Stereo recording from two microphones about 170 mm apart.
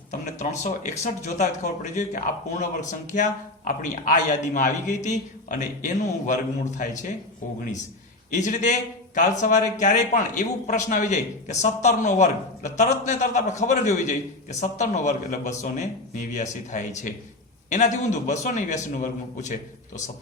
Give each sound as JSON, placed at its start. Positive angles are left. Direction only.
{"t": 0.1, "sound": "a man's voice", "side_deg": 45}
{"t": 8.3, "sound": "a man's voice", "side_deg": 45}